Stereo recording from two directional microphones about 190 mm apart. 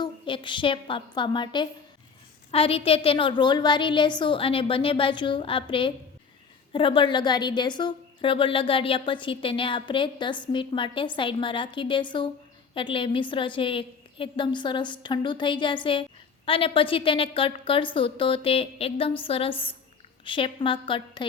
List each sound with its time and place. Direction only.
0.0 s a woman's voice: 25° left (ahead or behind)